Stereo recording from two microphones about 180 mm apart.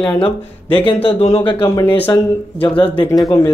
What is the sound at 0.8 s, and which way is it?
Speech, 30° left (ahead or behind).